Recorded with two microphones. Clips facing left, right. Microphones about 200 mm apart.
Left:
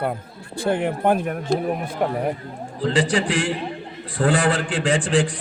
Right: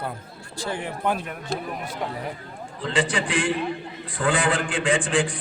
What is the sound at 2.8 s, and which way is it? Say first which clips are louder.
A man's voice: left 4 dB; 40° left (ahead or behind).